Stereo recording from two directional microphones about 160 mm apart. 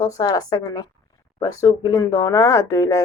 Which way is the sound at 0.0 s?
25° left (ahead or behind).